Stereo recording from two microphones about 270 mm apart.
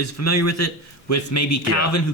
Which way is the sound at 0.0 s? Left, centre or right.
Left.